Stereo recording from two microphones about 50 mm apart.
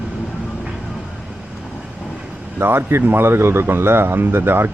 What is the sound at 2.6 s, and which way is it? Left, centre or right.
Speech, right.